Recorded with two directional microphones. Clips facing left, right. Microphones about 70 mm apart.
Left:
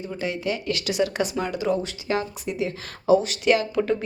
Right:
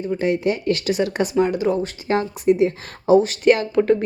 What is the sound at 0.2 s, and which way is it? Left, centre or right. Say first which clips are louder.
A woman's voice: right 5 dB; right.